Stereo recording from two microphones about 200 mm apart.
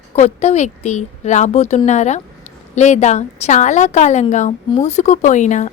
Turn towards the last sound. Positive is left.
turn(degrees=35)  # may be behind; listen again after turning